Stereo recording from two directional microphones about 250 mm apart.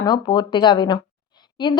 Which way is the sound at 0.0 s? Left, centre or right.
Centre.